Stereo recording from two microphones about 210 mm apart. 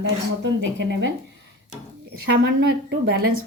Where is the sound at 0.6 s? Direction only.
60° right (ahead or behind).